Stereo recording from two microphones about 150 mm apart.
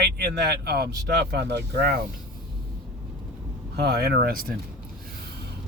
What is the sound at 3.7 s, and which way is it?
Speech, 90° right.